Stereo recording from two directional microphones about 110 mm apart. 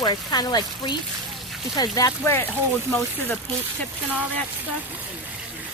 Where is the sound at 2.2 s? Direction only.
20° left (ahead or behind).